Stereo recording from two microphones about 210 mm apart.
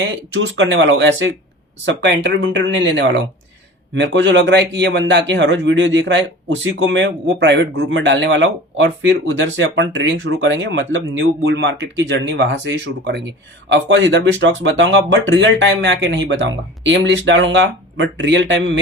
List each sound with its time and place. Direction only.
0.3 s speech: 60° right (ahead or behind)